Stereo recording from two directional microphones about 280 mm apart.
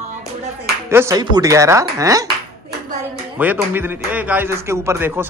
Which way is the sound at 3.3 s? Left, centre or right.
Centre.